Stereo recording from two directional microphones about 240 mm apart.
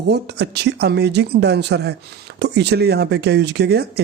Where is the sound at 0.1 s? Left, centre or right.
Right.